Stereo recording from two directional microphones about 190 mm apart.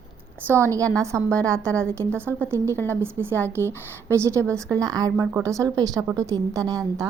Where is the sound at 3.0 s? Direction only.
10° right (ahead or behind).